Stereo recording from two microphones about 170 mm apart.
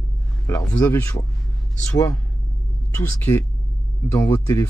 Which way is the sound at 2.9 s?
10° left (ahead or behind).